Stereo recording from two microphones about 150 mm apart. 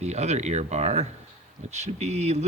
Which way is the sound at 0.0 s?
50° right (ahead or behind).